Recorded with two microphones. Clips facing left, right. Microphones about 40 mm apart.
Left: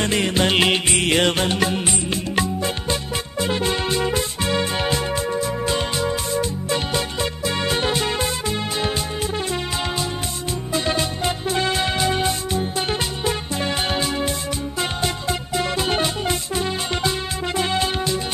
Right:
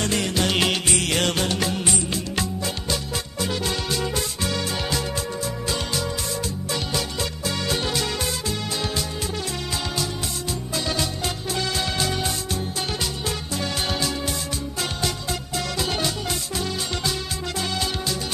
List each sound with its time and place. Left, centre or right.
0.0 s music: left
10.7 s music: left